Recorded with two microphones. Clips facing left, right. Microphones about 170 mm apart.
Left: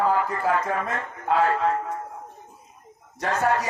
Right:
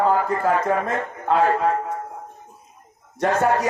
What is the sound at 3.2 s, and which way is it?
Speech, 35° right (ahead or behind).